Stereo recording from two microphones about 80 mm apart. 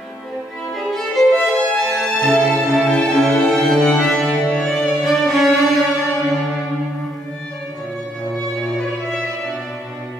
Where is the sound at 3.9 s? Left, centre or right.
Centre.